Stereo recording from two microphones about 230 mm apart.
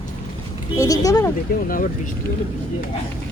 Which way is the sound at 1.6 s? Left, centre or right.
Left.